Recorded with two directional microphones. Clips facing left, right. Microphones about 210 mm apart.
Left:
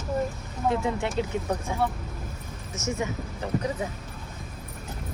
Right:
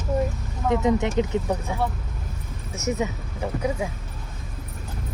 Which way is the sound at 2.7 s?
15° right (ahead or behind).